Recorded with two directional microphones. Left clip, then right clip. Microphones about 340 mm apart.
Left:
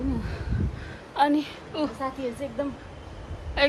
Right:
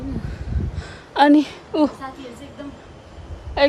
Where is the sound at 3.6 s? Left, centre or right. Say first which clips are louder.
Right 6 dB; centre.